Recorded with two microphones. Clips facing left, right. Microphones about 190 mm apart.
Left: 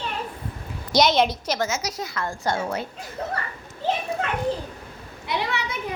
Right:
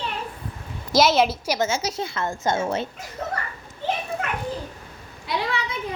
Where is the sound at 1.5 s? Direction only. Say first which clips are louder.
Right 2 dB; 25° right (ahead or behind).